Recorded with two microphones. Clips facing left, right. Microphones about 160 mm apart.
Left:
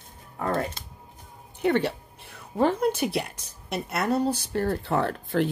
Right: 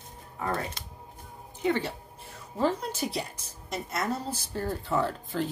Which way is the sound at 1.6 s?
60° left (ahead or behind).